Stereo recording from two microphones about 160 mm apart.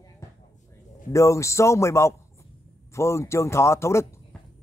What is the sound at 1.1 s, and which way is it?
A man's voice, 20° left (ahead or behind).